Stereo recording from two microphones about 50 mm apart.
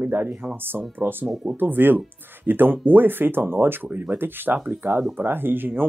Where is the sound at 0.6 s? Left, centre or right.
Right.